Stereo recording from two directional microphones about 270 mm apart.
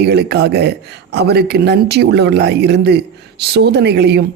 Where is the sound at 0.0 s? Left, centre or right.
Right.